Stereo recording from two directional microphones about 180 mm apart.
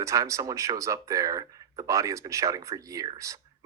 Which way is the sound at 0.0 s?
15° right (ahead or behind).